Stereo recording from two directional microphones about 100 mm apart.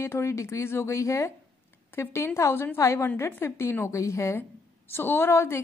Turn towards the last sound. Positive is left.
turn(degrees=25)  # may be behind; listen again after turning